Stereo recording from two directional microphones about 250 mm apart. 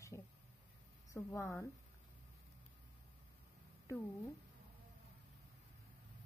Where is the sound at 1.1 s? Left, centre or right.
Centre.